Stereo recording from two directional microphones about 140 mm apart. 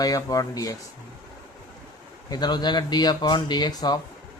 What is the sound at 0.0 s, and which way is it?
Speech, 25° left (ahead or behind).